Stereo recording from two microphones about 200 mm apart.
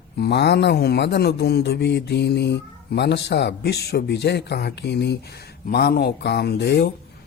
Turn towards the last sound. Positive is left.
turn(degrees=55)  # may be behind; listen again after turning